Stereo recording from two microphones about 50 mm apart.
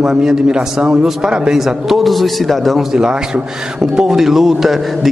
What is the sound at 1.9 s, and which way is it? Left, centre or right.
A man's voice, centre.